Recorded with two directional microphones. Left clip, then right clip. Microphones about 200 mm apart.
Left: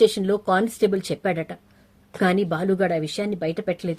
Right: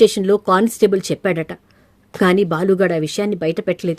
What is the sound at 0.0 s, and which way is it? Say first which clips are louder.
Speech: right 6 dB; 50° right (ahead or behind).